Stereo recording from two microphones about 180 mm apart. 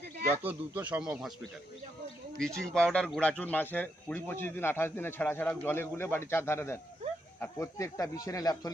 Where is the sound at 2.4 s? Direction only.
5° left (ahead or behind).